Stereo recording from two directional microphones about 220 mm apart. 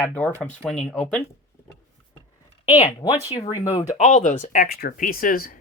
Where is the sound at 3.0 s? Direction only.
30° left (ahead or behind).